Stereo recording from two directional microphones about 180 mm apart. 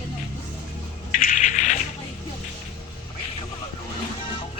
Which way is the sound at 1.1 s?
50° left (ahead or behind).